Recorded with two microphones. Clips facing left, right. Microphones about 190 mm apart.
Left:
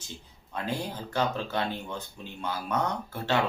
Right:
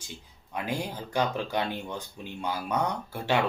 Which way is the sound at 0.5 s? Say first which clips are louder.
Right 1 dB; 10° right (ahead or behind).